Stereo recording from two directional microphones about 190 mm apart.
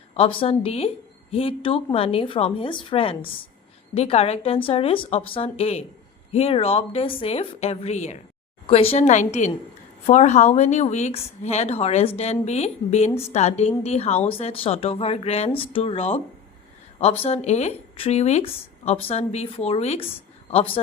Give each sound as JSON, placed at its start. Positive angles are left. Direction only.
{"t": 0.1, "sound": "a woman's voice", "side_deg": 30}